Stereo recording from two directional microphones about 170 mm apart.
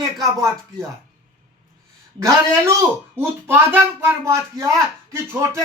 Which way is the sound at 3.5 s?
10° right (ahead or behind).